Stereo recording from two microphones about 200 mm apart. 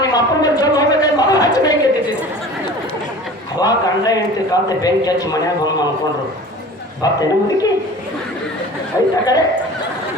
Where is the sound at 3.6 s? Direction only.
20° left (ahead or behind).